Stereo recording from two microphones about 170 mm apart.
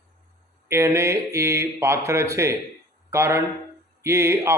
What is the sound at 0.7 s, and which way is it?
A man's voice, 15° right (ahead or behind).